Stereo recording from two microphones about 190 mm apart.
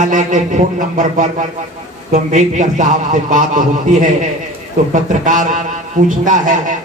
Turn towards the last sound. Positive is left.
turn(degrees=-40)  # may be behind; listen again after turning